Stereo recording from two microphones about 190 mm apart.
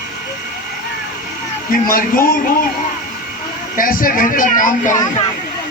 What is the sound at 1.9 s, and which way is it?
Speech, 45° left (ahead or behind).